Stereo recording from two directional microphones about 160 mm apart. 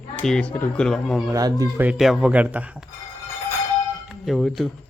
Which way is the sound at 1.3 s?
20° right (ahead or behind).